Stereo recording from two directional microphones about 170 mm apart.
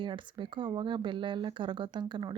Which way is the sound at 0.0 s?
30° right (ahead or behind).